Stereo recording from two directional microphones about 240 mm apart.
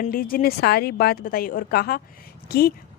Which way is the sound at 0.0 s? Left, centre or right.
Left.